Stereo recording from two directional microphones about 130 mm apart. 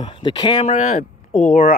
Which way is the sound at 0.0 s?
35° left (ahead or behind).